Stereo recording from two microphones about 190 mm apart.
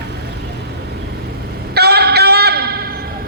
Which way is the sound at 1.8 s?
60° right (ahead or behind).